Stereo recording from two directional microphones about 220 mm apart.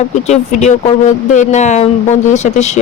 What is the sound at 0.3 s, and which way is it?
A woman's voice, 30° left (ahead or behind).